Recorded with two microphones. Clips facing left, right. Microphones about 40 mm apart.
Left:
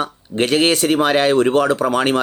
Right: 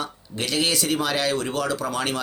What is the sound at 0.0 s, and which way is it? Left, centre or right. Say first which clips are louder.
Speech: left 10 dB; left.